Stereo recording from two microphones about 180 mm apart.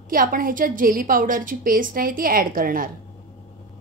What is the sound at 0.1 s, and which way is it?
A woman's voice, 50° right (ahead or behind).